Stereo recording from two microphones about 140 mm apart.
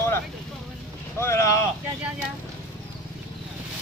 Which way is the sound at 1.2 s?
20° left (ahead or behind).